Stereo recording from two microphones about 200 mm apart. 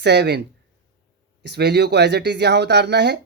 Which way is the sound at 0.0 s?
55° right (ahead or behind).